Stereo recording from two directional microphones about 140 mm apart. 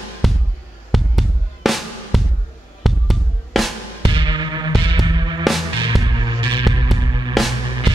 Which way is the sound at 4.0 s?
35° right (ahead or behind).